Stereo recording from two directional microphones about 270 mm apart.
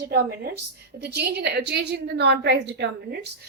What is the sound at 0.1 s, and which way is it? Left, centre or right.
A woman's voice, right.